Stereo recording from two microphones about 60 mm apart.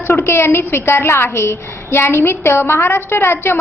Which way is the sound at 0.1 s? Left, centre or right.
Left.